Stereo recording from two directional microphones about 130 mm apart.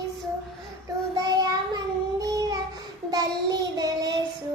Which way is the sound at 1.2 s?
30° right (ahead or behind).